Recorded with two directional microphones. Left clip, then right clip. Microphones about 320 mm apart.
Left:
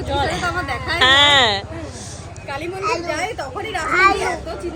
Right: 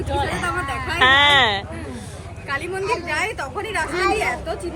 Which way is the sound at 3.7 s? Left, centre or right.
Left.